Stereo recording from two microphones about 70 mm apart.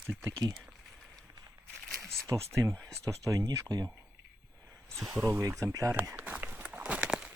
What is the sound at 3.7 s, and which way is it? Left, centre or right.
Speech, right.